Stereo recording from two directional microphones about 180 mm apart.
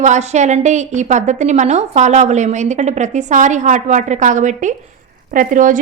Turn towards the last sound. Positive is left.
turn(degrees=-45)  # may be behind; listen again after turning